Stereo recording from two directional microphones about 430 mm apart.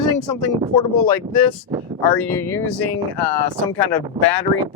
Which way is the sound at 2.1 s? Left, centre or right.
Left.